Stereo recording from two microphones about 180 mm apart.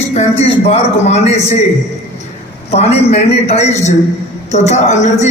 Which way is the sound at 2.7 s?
35° left (ahead or behind).